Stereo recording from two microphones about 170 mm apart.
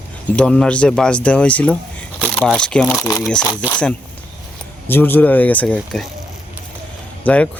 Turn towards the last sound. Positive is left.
turn(degrees=10)  # may be behind; listen again after turning